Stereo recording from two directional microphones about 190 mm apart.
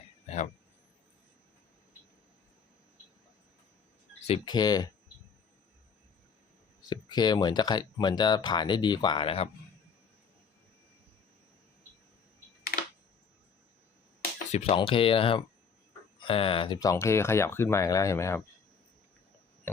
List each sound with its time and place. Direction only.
4.3 s speech: 20° left (ahead or behind)
6.9 s speech: 20° left (ahead or behind)
14.5 s speech: 30° left (ahead or behind); by 18.4 s 15° left (ahead or behind)